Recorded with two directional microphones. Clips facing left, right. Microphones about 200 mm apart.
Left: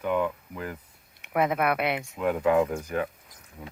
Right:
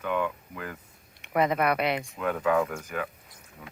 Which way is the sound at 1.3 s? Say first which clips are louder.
Even; 5° left (ahead or behind).